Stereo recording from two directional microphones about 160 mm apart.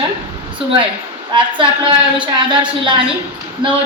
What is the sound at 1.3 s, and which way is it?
Speech, 30° right (ahead or behind).